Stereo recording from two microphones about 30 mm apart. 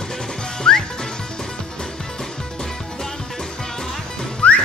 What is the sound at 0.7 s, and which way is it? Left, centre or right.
Music, left.